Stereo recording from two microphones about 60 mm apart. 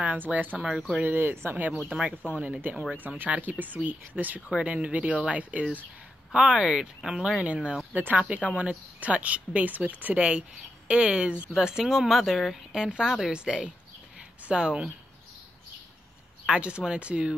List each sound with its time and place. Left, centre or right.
0.0 s speech: right
0.7 s speech: centre
1.0 s speech: right
1.9 s speech: right
7.3 s speech: centre
16.4 s speech: centre